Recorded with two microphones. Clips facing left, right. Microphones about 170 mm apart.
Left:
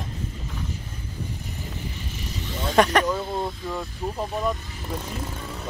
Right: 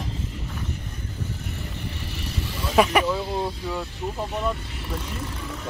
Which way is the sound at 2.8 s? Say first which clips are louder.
Even; 5° right (ahead or behind).